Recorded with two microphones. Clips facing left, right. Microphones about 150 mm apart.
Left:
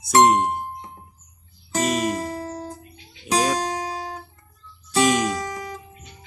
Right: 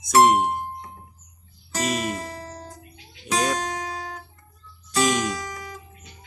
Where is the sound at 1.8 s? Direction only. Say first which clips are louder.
Left 3 dB; centre (ahead or behind).